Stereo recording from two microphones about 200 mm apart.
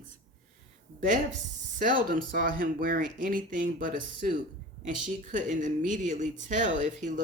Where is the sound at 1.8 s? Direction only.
45° right (ahead or behind).